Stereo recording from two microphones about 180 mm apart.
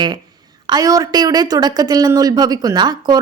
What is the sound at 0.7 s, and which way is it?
Speech, 20° right (ahead or behind).